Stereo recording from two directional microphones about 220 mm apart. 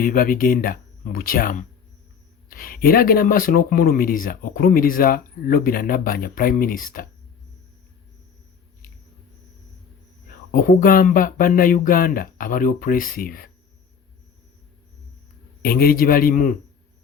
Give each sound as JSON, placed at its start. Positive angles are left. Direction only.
{"t": 0.0, "sound": "speech", "side_deg": 40}
{"t": 10.5, "sound": "speech", "side_deg": 40}
{"t": 15.6, "sound": "speech", "side_deg": 40}